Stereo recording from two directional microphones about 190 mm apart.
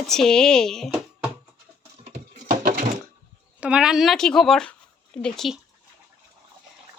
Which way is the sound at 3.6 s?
5° right (ahead or behind).